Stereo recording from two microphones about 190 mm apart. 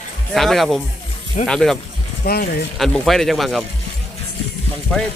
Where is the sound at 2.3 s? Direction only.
55° left (ahead or behind).